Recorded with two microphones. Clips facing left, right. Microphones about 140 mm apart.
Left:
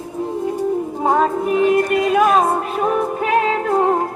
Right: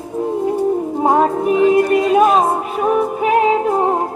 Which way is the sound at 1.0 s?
20° right (ahead or behind).